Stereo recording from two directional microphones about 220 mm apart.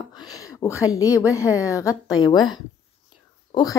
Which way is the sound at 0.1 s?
15° left (ahead or behind).